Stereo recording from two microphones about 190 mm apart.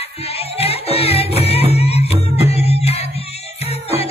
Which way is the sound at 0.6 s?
30° left (ahead or behind).